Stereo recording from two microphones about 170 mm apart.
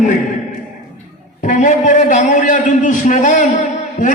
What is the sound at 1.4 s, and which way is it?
A man's voice, 45° left (ahead or behind).